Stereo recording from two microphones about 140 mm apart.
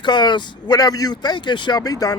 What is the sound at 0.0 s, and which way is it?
A man's voice, 30° left (ahead or behind).